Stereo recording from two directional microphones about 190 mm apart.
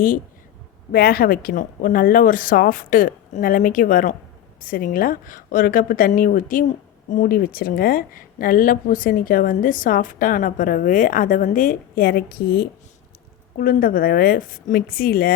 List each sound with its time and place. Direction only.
0.9 s speech: 50° left (ahead or behind)